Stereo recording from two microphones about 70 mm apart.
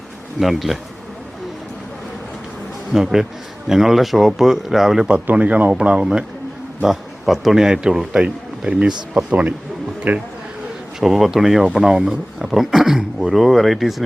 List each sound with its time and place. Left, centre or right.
0.3 s speech: centre
2.9 s speech: centre
5.2 s speech: right
6.8 s speech: centre; by 10.2 s right
11.0 s speech: centre